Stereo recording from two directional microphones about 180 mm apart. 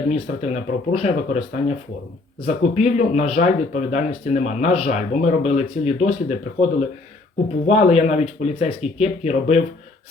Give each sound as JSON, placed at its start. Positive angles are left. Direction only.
{"t": 0.1, "sound": "speech", "side_deg": 40}